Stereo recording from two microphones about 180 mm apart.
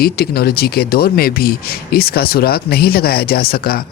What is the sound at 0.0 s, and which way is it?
Speech, 60° left (ahead or behind).